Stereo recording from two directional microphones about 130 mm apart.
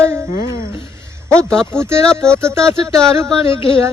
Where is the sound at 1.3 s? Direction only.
5° left (ahead or behind).